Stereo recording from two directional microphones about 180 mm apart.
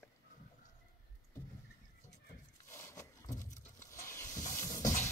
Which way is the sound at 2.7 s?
15° left (ahead or behind).